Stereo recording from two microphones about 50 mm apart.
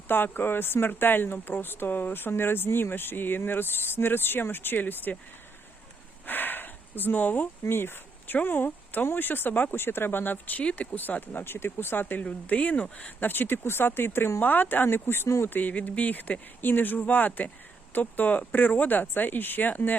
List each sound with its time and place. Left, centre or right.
0.1 s speech: left
6.2 s a sound: left
7.6 s speech: left
10.6 s speech: left
10.9 s speech: left